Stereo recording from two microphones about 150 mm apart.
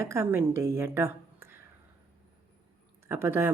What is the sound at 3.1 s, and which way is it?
Speech, 15° right (ahead or behind).